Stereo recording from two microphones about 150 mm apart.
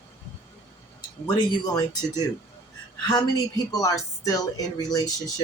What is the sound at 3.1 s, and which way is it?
Speech, 25° left (ahead or behind).